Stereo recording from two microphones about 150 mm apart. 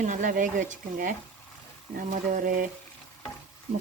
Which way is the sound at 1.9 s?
65° right (ahead or behind).